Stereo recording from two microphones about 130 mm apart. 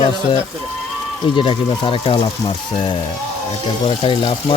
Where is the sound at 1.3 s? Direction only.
40° left (ahead or behind).